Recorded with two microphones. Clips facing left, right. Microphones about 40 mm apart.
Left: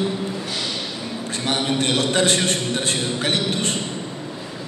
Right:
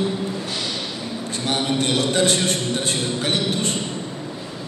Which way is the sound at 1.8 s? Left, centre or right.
Left.